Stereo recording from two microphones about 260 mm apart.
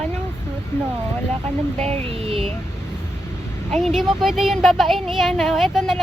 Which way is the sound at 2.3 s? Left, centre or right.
Centre.